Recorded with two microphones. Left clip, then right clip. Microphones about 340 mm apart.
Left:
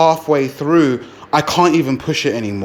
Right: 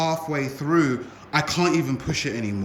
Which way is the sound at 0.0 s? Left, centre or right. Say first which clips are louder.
Left 12 dB; centre.